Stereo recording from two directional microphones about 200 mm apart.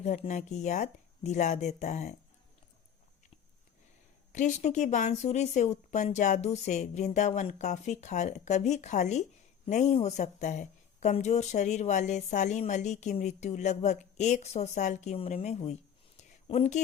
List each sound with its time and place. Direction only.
0.0 s speech: 35° left (ahead or behind)
4.3 s speech: 40° left (ahead or behind)